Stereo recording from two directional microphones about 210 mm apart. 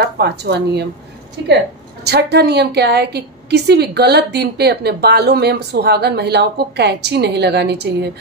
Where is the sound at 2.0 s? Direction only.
50° right (ahead or behind).